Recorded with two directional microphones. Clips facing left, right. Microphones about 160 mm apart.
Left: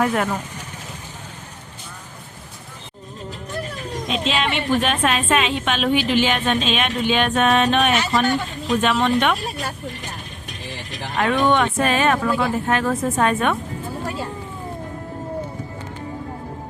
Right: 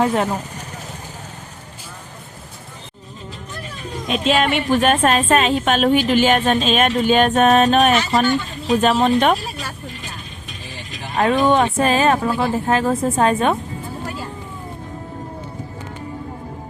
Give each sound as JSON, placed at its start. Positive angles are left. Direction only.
{"t": 0.0, "sound": "speech", "side_deg": -25}
{"t": 4.1, "sound": "a woman's voice", "side_deg": -50}
{"t": 11.2, "sound": "speech", "side_deg": -35}